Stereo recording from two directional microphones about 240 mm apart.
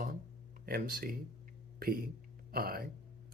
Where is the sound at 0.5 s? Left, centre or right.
Right.